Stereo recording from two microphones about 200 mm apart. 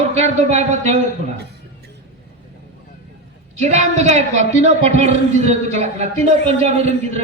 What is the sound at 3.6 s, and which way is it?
A man's voice, 35° right (ahead or behind).